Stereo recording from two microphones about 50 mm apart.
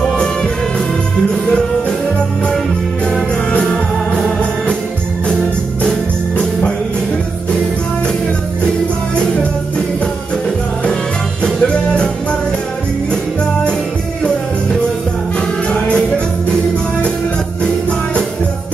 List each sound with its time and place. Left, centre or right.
0.2 s music: centre
5.9 s music: centre
11.6 s music: left